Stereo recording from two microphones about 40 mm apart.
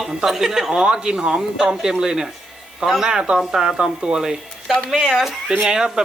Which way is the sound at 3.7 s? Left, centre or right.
Right.